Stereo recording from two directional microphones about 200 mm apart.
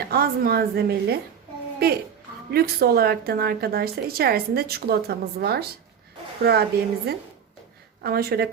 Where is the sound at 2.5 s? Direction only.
50° right (ahead or behind).